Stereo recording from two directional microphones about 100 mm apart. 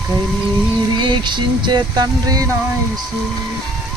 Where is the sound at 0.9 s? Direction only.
50° right (ahead or behind).